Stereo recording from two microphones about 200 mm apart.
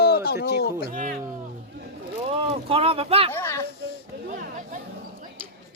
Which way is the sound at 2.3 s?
30° right (ahead or behind).